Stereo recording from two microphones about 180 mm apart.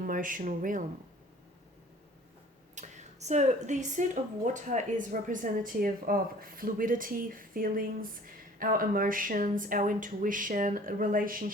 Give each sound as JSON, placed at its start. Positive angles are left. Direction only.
{"t": 0.0, "sound": "speech", "side_deg": -50}
{"t": 2.7, "sound": "a woman's voice", "side_deg": -40}